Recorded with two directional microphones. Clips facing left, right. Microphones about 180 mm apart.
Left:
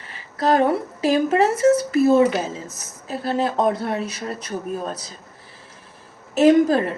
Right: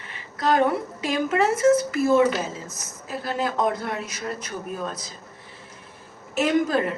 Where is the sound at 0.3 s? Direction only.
35° left (ahead or behind).